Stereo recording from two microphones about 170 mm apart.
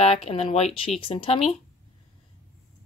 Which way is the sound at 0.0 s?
40° left (ahead or behind).